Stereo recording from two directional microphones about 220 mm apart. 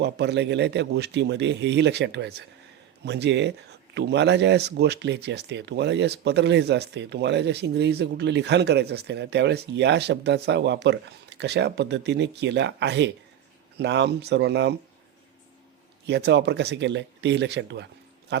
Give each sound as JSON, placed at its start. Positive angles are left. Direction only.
{"t": 0.0, "sound": "speech", "side_deg": -50}
{"t": 16.0, "sound": "speech", "side_deg": -50}